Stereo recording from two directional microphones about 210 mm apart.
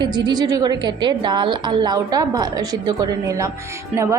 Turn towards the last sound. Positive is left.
turn(degrees=-15)  # may be behind; listen again after turning